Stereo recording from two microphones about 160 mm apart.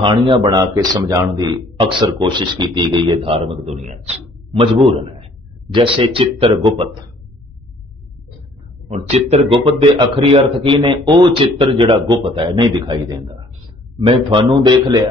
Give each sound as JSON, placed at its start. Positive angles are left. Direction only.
{"t": 0.0, "sound": "a man's voice", "side_deg": -30}
{"t": 8.8, "sound": "speech", "side_deg": -40}
{"t": 13.9, "sound": "a man's voice", "side_deg": -30}